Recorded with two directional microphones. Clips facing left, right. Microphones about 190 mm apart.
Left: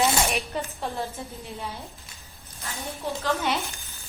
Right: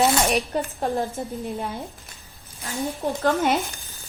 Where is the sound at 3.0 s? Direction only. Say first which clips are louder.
Right 5 dB; 50° right (ahead or behind).